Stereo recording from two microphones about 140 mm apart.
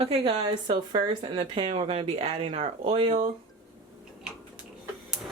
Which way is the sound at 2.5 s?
55° right (ahead or behind).